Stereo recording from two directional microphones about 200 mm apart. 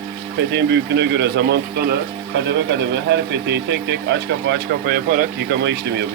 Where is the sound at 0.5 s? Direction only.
60° right (ahead or behind).